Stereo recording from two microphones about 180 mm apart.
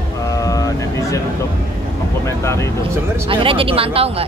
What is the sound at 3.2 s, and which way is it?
Speech, 30° right (ahead or behind).